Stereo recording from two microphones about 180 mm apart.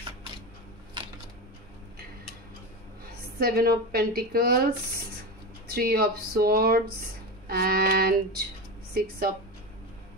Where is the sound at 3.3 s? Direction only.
55° right (ahead or behind).